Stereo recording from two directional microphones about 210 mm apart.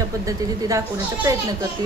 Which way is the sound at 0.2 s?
15° right (ahead or behind).